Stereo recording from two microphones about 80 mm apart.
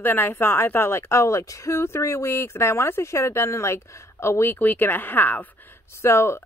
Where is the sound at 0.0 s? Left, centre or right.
Left.